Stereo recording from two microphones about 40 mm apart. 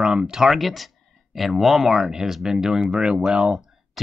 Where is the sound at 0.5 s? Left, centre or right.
Centre.